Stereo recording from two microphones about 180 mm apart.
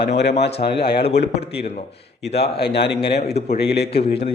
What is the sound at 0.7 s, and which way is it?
Speech, 60° left (ahead or behind).